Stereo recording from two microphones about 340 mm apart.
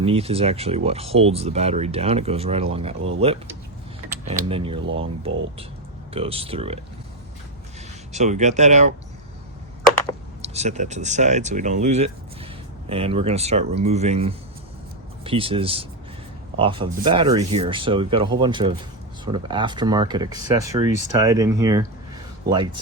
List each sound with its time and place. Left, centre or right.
0.0 s speech: centre
6.1 s speech: centre
8.1 s speech: centre
10.4 s speech: centre